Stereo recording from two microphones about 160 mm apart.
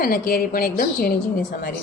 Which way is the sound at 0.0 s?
65° left (ahead or behind).